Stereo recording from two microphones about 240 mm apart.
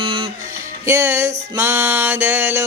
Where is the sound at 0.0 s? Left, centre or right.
Right.